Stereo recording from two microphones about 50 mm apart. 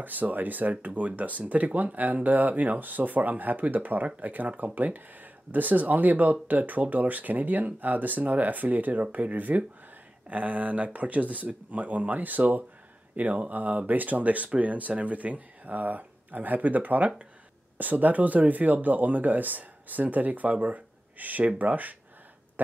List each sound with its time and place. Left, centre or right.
0.0 s speech: right